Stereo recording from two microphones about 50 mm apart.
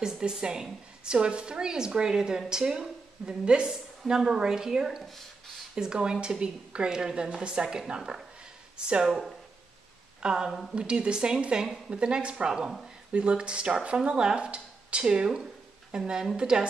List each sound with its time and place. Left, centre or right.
0.0 s a woman's voice: centre
10.2 s a woman's voice: centre